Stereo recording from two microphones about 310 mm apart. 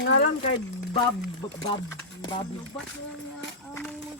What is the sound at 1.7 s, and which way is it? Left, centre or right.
Speech, centre.